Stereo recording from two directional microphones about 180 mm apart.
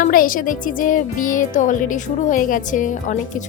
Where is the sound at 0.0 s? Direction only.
50° left (ahead or behind).